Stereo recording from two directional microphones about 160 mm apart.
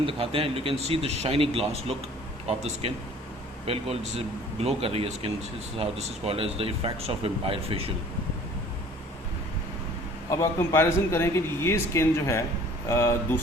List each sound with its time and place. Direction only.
0.0 s speech: 35° right (ahead or behind)
10.2 s speech: 15° left (ahead or behind)